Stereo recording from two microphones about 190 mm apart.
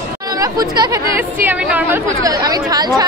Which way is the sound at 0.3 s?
20° right (ahead or behind).